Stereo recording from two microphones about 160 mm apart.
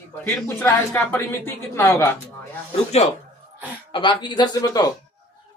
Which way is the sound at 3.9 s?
30° left (ahead or behind).